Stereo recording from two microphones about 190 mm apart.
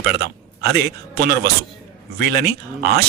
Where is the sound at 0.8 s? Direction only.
55° right (ahead or behind).